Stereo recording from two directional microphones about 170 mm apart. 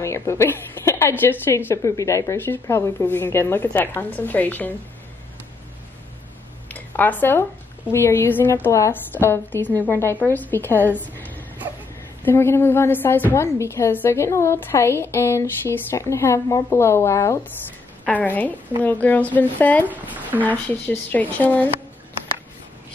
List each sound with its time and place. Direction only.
0.0 s a woman's voice: 15° left (ahead or behind)
6.7 s a sound: 10° left (ahead or behind)
7.9 s a woman's voice: 15° left (ahead or behind)
11.6 s whimper: 10° right (ahead or behind)
12.2 s a woman's voice: 15° left (ahead or behind)
19.9 s speech: 10° right (ahead or behind)
20.4 s a woman's voice: 10° left (ahead or behind)